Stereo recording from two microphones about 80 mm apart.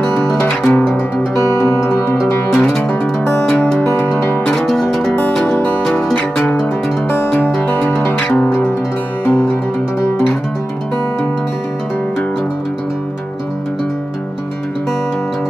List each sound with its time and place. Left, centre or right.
0.5 s music: centre
0.8 s music: centre
1.3 s music: left
2.5 s music: centre
7.9 s music: left
9.2 s music: left